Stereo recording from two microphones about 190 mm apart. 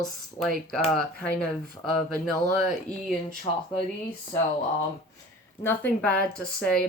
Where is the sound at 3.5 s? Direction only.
25° left (ahead or behind).